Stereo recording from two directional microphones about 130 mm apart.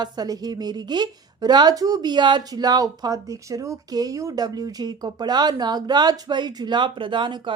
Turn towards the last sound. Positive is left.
turn(degrees=-40)  # may be behind; listen again after turning